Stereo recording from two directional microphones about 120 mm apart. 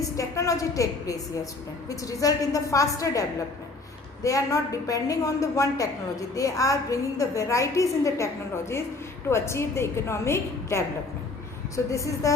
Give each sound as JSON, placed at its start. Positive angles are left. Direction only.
{"t": 0.0, "sound": "a woman's voice", "side_deg": 25}
{"t": 9.3, "sound": "a woman's voice", "side_deg": 20}
{"t": 11.9, "sound": "a woman's voice", "side_deg": 25}